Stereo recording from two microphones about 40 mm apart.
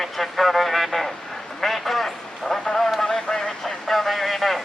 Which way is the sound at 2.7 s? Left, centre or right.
Centre.